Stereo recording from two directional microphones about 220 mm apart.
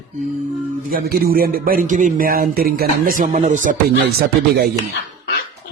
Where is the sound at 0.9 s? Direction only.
45° right (ahead or behind).